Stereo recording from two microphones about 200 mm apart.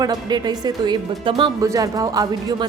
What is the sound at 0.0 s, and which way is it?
Speech, 20° right (ahead or behind).